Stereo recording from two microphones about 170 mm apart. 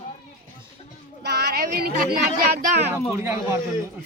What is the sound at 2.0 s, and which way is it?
Speech, 65° right (ahead or behind).